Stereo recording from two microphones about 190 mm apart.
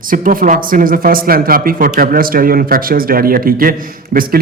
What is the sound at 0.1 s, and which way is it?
Speech, 45° right (ahead or behind).